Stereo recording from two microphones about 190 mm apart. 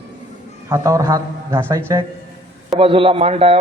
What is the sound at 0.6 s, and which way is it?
A man's voice, 15° right (ahead or behind).